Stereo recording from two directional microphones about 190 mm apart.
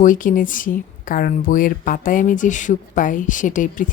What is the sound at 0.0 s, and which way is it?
Speech, 45° left (ahead or behind).